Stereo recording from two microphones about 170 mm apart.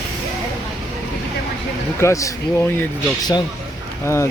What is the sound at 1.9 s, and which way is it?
Speech, 15° left (ahead or behind).